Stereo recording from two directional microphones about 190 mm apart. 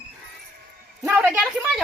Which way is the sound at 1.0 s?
10° right (ahead or behind).